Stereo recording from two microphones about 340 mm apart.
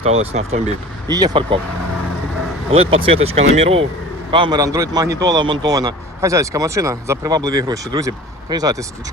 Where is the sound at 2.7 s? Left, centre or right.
Centre.